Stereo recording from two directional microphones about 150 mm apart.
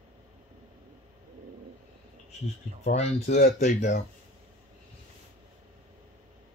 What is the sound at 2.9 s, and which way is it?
Speech, 45° left (ahead or behind).